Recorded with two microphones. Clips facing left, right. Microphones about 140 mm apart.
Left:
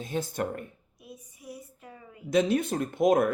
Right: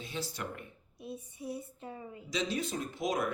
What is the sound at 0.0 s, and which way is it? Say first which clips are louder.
Speech: left 9 dB; 50° left (ahead or behind).